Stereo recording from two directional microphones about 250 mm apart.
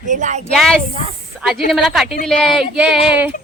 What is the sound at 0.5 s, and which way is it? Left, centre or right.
Speech, centre.